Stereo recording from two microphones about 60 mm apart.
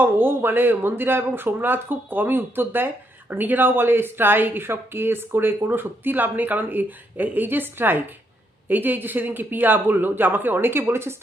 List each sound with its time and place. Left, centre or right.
0.0 s speech: right